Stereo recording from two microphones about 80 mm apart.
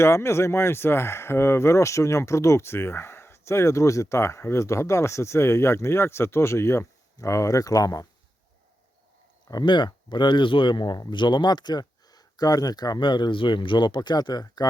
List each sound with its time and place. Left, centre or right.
0.0 s speech: left
9.5 s speech: left
13.0 s speech: left